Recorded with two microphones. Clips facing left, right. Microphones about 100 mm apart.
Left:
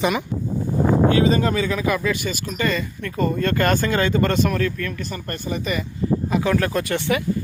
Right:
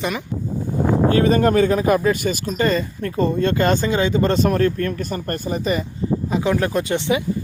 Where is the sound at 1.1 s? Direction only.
50° right (ahead or behind); by 4.3 s 15° right (ahead or behind).